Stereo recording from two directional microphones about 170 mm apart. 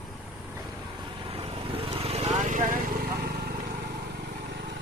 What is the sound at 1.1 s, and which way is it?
Vehicle, 30° right (ahead or behind).